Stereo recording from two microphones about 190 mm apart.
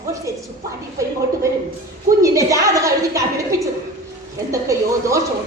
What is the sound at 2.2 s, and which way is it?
A woman's voice, 15° right (ahead or behind).